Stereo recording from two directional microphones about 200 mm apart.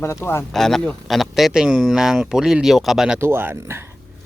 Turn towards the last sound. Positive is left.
turn(degrees=-10)  # may be behind; listen again after turning